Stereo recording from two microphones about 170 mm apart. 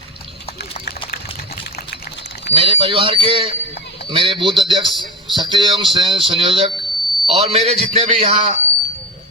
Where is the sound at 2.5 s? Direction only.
30° right (ahead or behind).